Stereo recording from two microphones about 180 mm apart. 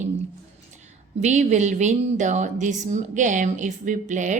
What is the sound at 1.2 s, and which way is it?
A woman's voice, 40° right (ahead or behind).